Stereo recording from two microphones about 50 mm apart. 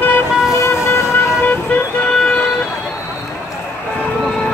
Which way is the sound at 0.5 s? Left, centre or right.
Left.